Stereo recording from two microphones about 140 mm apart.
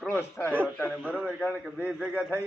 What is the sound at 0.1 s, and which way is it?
Speech, 15° left (ahead or behind).